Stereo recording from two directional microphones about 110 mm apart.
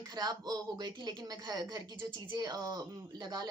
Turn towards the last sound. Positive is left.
turn(degrees=-35)  # may be behind; listen again after turning